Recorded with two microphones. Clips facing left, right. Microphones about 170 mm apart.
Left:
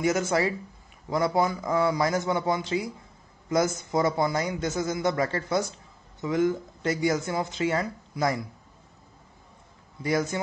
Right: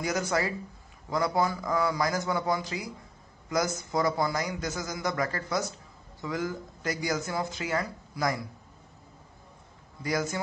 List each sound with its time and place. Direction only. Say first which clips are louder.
0.0 s a man's voice: left 4 dB; 25° left (ahead or behind)
10.0 s a man's voice: left 4 dB; 25° left (ahead or behind)